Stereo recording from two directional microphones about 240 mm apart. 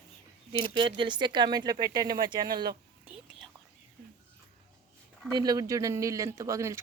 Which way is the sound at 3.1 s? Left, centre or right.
Centre.